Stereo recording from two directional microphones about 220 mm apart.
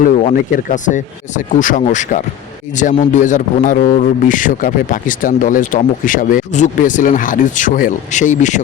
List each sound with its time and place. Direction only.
0.0 s a man's voice: 35° left (ahead or behind)